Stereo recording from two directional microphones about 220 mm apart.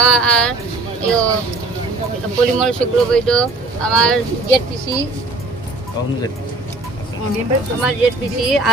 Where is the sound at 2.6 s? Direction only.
5° left (ahead or behind).